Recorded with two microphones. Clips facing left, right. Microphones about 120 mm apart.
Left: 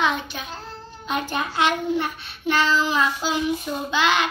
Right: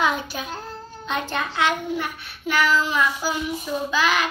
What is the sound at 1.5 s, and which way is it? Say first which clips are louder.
Child singing: left 2 dB; 25° left (ahead or behind).